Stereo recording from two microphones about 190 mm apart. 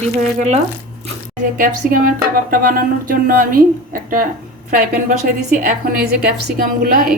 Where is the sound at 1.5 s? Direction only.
50° right (ahead or behind).